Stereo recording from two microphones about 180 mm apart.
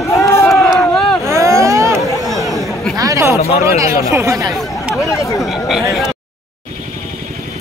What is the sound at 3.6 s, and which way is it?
Speech, 15° right (ahead or behind).